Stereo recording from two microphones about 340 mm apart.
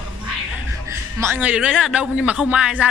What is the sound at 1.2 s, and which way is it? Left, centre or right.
A man's voice, centre.